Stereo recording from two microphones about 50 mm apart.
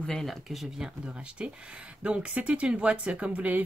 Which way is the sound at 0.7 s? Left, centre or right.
Centre.